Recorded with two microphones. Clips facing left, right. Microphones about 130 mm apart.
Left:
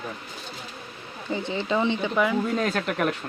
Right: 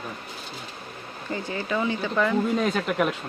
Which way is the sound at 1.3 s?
25° left (ahead or behind).